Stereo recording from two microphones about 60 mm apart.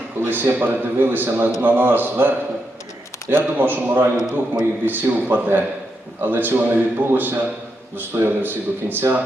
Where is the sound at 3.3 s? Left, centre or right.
Right.